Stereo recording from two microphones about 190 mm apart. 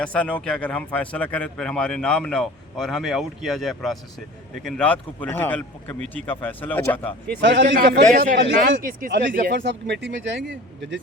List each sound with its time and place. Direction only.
0.0 s speech: 5° left (ahead or behind)
7.6 s speech: 55° right (ahead or behind)
9.6 s speech: 65° right (ahead or behind)